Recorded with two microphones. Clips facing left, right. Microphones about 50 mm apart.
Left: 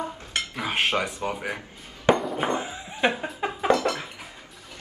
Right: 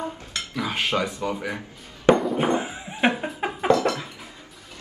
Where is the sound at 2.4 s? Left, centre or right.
Right.